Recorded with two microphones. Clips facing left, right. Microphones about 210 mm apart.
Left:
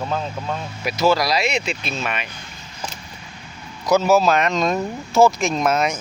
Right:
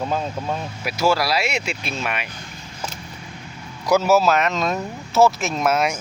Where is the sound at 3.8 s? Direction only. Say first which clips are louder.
Left 1 dB; 10° right (ahead or behind).